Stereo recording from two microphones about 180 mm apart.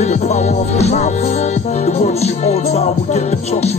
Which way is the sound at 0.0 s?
35° left (ahead or behind).